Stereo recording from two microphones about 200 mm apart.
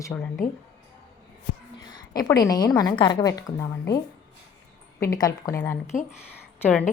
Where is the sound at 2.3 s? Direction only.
20° left (ahead or behind).